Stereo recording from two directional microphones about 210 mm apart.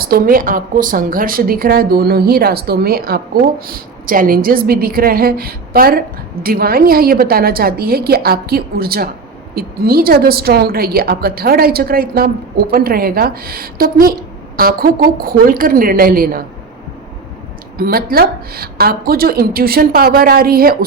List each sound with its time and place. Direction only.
0.0 s a woman's voice: 45° right (ahead or behind)
17.7 s a woman's voice: 45° right (ahead or behind)